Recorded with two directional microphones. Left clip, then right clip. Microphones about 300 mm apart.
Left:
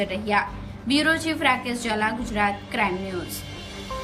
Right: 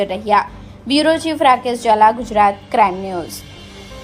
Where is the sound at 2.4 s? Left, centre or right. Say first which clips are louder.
Right 11 dB; right.